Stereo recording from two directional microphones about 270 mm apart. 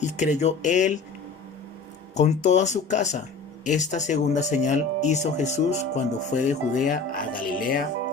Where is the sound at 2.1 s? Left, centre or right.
Left.